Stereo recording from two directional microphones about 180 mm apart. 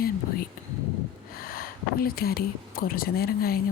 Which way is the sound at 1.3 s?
55° left (ahead or behind).